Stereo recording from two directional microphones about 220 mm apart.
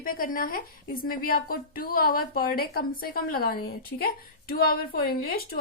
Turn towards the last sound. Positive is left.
turn(degrees=40)  # may be behind; listen again after turning